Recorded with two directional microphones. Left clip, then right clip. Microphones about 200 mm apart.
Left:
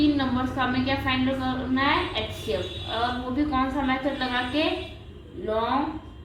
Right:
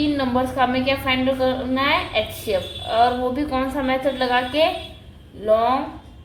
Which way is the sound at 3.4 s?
50° right (ahead or behind).